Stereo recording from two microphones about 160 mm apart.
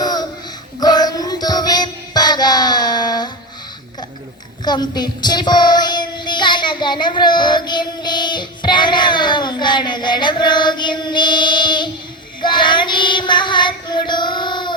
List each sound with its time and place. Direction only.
0.0 s a sound: 25° left (ahead or behind)
0.8 s music: 25° left (ahead or behind)
4.6 s child singing: 25° left (ahead or behind)